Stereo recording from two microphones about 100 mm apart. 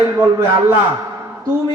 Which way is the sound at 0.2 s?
25° right (ahead or behind).